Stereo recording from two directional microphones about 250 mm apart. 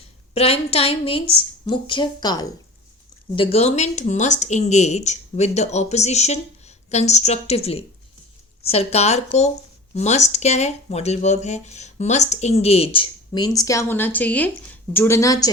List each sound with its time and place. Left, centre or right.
0.3 s speech: left